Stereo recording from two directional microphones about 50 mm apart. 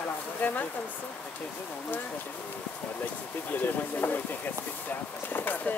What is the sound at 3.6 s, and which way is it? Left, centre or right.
Speech, left.